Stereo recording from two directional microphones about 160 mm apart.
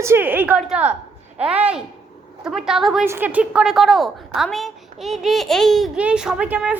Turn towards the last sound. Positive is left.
turn(degrees=-5)  # may be behind; listen again after turning